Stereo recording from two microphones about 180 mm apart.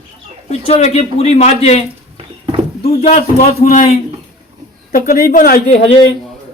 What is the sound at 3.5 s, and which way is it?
Speech, 50° left (ahead or behind).